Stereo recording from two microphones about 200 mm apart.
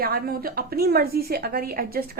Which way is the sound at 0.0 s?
50° right (ahead or behind).